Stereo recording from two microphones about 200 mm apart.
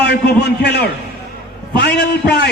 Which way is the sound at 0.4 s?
55° left (ahead or behind).